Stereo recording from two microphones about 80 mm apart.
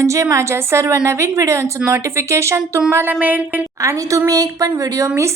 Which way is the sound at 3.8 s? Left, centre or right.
Right.